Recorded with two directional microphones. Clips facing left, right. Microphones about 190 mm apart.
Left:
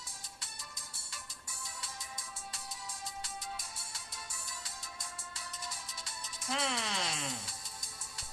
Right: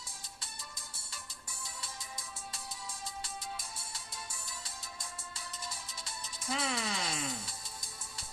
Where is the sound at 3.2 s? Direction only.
30° right (ahead or behind).